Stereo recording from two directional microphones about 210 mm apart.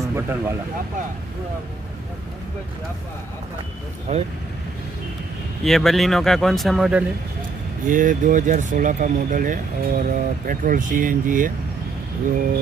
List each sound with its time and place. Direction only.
0.1 s speech: 10° right (ahead or behind)
4.1 s speech: 30° right (ahead or behind)
5.6 s speech: centre (ahead or behind)
7.8 s speech: 40° right (ahead or behind)